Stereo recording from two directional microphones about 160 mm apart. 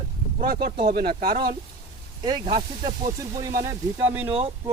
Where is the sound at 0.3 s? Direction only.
60° right (ahead or behind).